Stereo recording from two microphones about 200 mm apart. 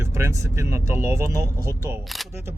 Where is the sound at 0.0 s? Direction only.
15° right (ahead or behind).